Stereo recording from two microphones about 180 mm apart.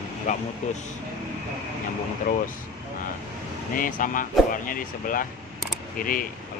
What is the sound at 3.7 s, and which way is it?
Speech, 50° left (ahead or behind).